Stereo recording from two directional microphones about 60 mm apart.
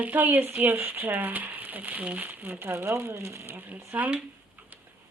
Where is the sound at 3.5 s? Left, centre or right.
Right.